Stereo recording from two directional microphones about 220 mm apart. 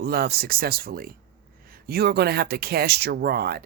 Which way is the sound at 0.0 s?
45° right (ahead or behind).